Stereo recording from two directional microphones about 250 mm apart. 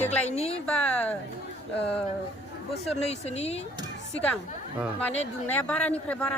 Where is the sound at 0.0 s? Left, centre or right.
Left.